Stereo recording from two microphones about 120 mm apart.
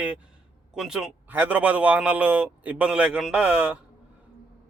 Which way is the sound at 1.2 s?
15° right (ahead or behind).